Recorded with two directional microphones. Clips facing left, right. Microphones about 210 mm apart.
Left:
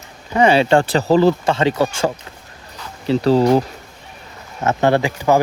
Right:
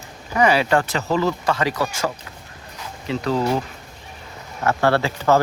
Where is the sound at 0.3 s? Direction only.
25° left (ahead or behind).